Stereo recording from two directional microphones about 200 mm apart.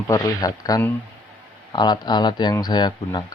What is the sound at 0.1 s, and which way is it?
Speech, 20° left (ahead or behind).